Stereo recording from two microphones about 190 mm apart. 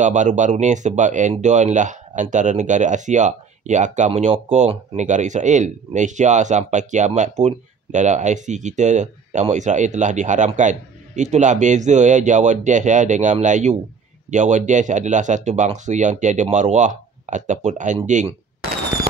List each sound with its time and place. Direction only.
0.0 s speech: 40° right (ahead or behind)